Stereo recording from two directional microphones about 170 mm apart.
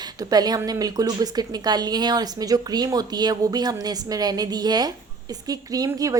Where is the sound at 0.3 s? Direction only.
25° right (ahead or behind).